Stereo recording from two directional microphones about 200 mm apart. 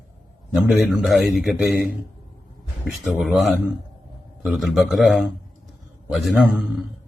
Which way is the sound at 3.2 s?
Centre (ahead or behind).